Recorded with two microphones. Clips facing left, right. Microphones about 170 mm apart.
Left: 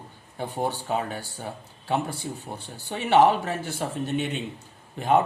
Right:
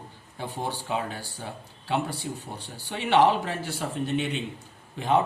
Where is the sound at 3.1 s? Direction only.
45° left (ahead or behind).